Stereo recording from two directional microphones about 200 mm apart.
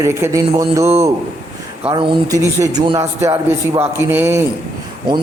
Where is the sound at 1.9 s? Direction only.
25° right (ahead or behind).